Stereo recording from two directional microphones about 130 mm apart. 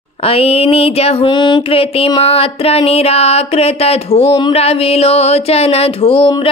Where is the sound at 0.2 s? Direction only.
50° left (ahead or behind).